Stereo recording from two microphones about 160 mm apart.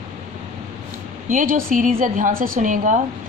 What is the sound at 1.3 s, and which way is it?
A woman's voice, 55° right (ahead or behind).